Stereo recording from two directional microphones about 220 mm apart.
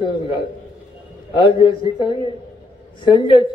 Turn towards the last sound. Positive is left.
turn(degrees=20)  # may be behind; listen again after turning